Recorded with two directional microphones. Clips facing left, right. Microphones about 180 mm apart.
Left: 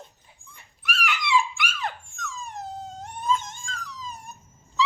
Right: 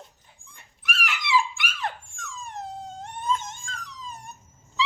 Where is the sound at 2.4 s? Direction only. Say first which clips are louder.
Right 1 dB; centre (ahead or behind).